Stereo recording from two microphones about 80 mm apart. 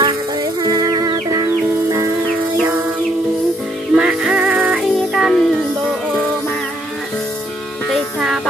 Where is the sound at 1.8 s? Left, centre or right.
Right.